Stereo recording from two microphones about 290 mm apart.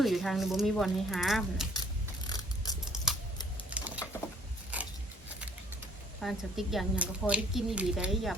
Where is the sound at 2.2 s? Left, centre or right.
Centre.